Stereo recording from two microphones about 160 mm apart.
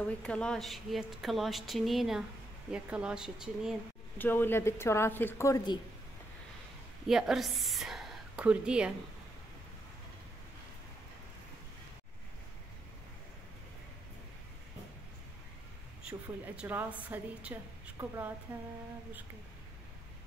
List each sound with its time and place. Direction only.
0.0 s a woman's voice: 5° left (ahead or behind)
4.2 s a woman's voice: 15° left (ahead or behind)
7.1 s a woman's voice: 5° right (ahead or behind)
16.0 s a woman's voice: 5° right (ahead or behind)